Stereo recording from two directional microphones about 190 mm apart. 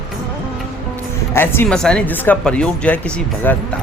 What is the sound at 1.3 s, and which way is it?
Speech, 10° left (ahead or behind).